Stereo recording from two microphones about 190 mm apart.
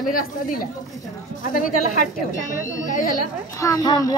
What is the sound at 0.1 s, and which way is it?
A woman's voice, 50° left (ahead or behind).